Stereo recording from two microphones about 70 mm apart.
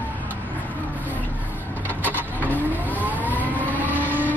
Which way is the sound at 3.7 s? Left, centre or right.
Right.